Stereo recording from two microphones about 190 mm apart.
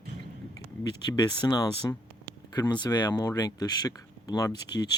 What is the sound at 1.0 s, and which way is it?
Speech, 20° left (ahead or behind).